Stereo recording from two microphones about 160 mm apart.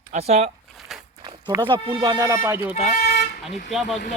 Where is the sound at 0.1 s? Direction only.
40° right (ahead or behind).